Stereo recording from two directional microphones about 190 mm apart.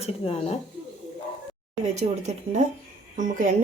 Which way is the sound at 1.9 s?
35° right (ahead or behind).